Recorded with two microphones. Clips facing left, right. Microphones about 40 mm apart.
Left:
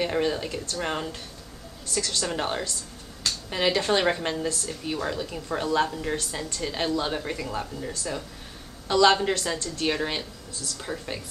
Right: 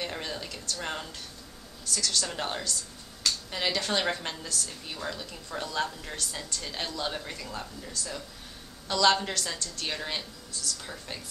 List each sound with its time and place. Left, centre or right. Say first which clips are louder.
0.0 s a woman's voice: left 10 dB; centre